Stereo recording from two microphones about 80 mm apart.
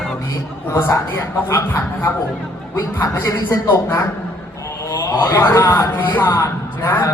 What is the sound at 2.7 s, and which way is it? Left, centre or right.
Speech, left.